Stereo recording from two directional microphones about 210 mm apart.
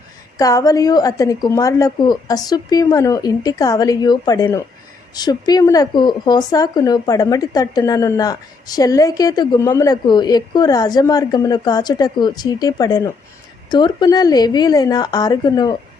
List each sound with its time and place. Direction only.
0.3 s a woman's voice: 15° left (ahead or behind)